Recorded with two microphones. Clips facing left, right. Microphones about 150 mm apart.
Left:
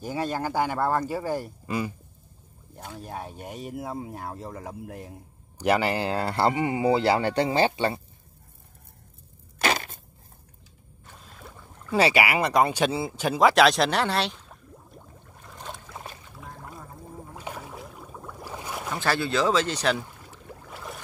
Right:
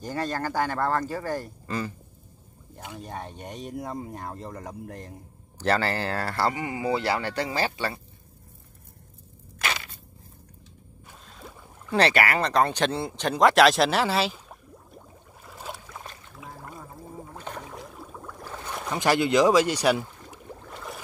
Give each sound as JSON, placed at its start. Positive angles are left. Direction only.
{"t": 0.0, "sound": "speech", "side_deg": 10}
{"t": 9.6, "sound": "crushing", "side_deg": 45}
{"t": 11.2, "sound": "boat", "side_deg": 5}
{"t": 11.9, "sound": "speech", "side_deg": 5}
{"t": 15.9, "sound": "boat", "side_deg": 10}
{"t": 16.3, "sound": "a sound", "side_deg": -5}
{"t": 17.4, "sound": "a sound", "side_deg": 10}
{"t": 18.9, "sound": "speech", "side_deg": -15}
{"t": 20.6, "sound": "boat", "side_deg": 0}